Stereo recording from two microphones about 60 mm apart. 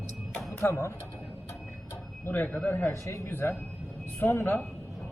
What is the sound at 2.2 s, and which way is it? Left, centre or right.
Speech, left.